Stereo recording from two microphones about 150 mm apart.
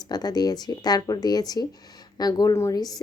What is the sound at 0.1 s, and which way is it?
Speech, 25° left (ahead or behind).